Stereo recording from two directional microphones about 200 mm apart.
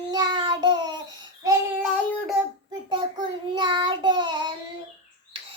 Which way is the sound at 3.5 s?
25° right (ahead or behind).